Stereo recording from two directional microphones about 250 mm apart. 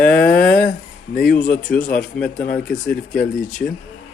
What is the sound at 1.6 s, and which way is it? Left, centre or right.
Speech, centre.